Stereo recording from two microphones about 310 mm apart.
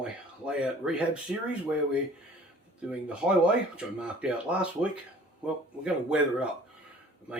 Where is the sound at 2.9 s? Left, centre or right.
Centre.